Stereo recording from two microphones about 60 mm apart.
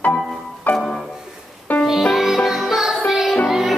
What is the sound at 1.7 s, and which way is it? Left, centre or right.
Music, left.